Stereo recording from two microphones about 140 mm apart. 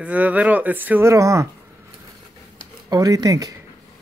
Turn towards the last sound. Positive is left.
turn(degrees=-25)  # may be behind; listen again after turning